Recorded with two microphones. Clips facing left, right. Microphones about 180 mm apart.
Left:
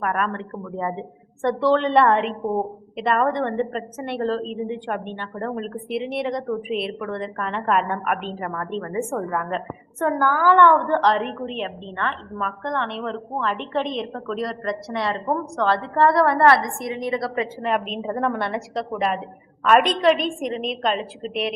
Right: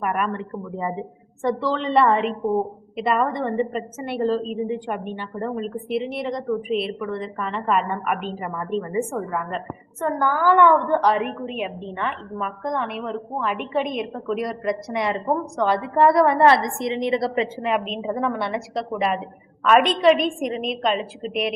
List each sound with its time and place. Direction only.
0.0 s a woman's voice: 10° right (ahead or behind); by 17.5 s 25° right (ahead or behind)
17.6 s a woman's voice: 5° right (ahead or behind)
20.5 s a woman's voice: 40° left (ahead or behind)